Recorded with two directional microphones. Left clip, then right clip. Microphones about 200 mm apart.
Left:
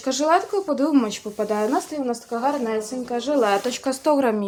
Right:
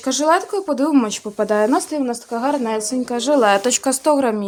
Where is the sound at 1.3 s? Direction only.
50° right (ahead or behind).